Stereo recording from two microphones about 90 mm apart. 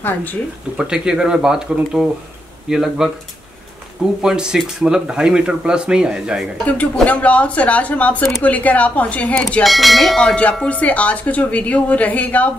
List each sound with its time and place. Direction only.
0.7 s speech: 10° right (ahead or behind)
4.2 s speech: 5° right (ahead or behind)
6.6 s a woman's voice: 15° left (ahead or behind)
9.6 s speech: centre (ahead or behind)
10.2 s a woman's voice: 15° left (ahead or behind)